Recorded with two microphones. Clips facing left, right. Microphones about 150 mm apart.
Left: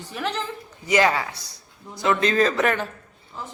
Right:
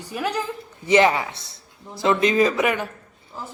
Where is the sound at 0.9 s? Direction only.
20° right (ahead or behind).